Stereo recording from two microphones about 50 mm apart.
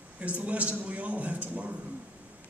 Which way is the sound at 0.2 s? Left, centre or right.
Right.